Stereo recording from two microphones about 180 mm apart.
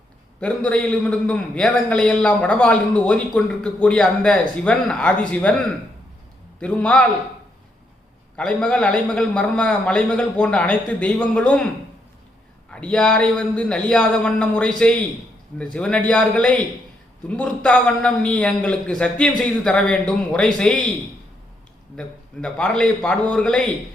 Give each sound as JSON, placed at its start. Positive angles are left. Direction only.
{"t": 0.3, "sound": "a man's voice", "side_deg": 5}
{"t": 8.4, "sound": "a man's voice", "side_deg": 5}
{"t": 12.7, "sound": "a man's voice", "side_deg": 5}
{"t": 21.9, "sound": "a man's voice", "side_deg": 5}